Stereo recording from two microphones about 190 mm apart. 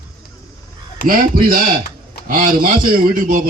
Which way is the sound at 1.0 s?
45° right (ahead or behind).